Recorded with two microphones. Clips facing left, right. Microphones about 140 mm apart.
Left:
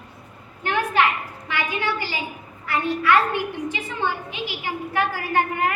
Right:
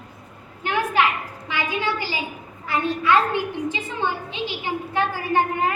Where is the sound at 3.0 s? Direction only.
20° right (ahead or behind).